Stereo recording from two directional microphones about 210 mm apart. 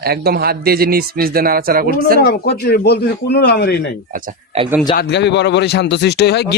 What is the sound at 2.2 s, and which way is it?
Speech, 50° left (ahead or behind).